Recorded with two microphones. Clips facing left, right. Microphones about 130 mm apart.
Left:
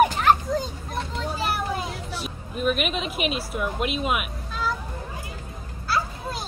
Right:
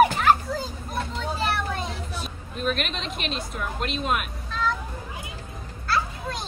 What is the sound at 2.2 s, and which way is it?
Speech, 5° left (ahead or behind).